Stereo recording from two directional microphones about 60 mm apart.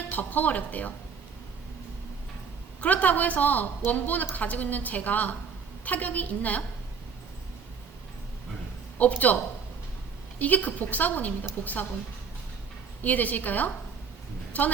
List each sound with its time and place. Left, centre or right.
0.1 s a woman's voice: left
2.8 s a woman's voice: left
9.0 s a man's voice: left
13.0 s a woman's voice: left